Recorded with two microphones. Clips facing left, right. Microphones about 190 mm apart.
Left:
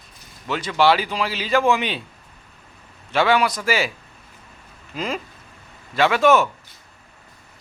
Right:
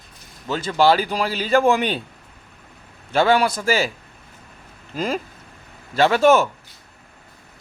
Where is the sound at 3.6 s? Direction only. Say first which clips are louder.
Right 2 dB; 40° right (ahead or behind).